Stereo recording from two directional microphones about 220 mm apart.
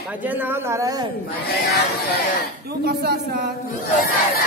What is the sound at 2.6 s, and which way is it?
Speech, 45° right (ahead or behind).